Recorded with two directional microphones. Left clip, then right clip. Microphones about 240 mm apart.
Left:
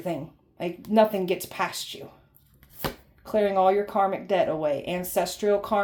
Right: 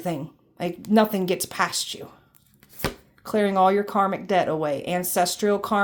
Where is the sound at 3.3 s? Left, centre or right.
Right.